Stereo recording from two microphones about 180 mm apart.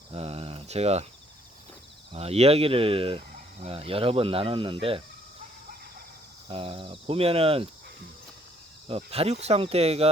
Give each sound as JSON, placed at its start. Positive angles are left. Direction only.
{"t": 0.1, "sound": "speech", "side_deg": -35}
{"t": 2.1, "sound": "speech", "side_deg": -35}
{"t": 6.5, "sound": "speech", "side_deg": -30}
{"t": 9.0, "sound": "speech", "side_deg": -35}